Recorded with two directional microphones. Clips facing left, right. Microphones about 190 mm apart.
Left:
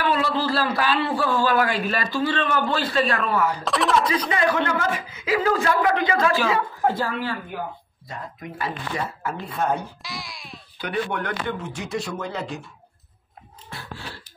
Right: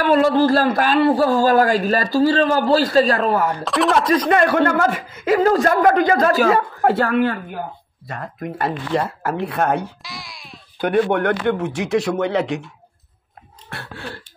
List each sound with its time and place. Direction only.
0.0 s a man's voice: 45° right (ahead or behind)
3.6 s speech: centre (ahead or behind)
4.1 s a man's voice: 55° right (ahead or behind)
6.8 s speech: 65° right (ahead or behind)
10.0 s a sound: centre (ahead or behind)
10.8 s speech: 55° right (ahead or behind); by 12.6 s 75° right (ahead or behind)
13.7 s a sound: 70° right (ahead or behind)